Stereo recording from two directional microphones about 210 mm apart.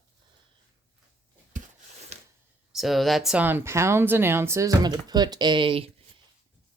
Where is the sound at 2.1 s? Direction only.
30° right (ahead or behind).